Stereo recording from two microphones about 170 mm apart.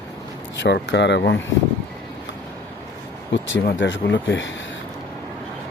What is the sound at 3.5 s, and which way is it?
Speech, 90° left.